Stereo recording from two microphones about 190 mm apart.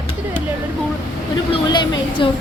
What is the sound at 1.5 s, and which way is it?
Speech, 25° left (ahead or behind).